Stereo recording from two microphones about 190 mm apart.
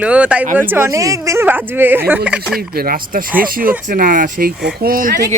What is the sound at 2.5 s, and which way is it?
Speech, 50° right (ahead or behind).